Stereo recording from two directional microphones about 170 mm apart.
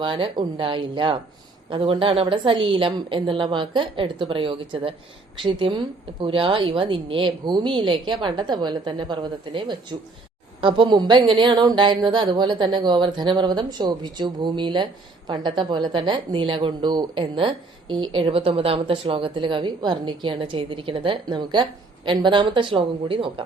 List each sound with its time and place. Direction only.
0.0 s a woman's voice: 25° right (ahead or behind)